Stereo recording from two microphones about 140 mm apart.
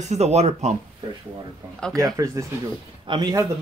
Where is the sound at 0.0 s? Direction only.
50° right (ahead or behind).